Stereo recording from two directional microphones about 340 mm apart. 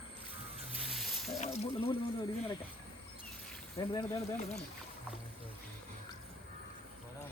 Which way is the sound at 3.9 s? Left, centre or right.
Centre.